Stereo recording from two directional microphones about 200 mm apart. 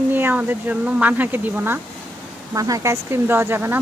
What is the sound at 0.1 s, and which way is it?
Speech, 10° right (ahead or behind).